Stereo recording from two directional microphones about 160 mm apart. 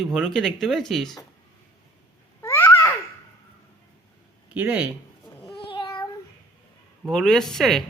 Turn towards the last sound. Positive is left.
turn(degrees=0)  # may be behind; listen again after turning